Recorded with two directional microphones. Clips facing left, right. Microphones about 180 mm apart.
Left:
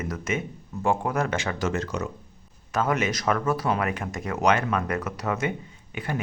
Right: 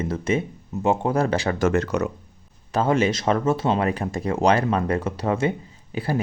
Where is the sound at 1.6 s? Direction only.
60° right (ahead or behind).